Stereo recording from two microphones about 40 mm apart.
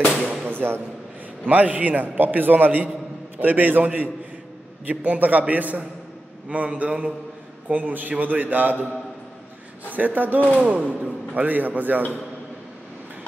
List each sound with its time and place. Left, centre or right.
0.2 s a sound: centre
0.5 s a sound: right
1.4 s a man's voice: right
7.6 s a man's voice: right
9.8 s a man's voice: right
10.6 s a man's voice: right